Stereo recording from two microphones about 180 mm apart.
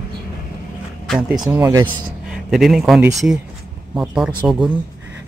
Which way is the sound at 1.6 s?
20° right (ahead or behind).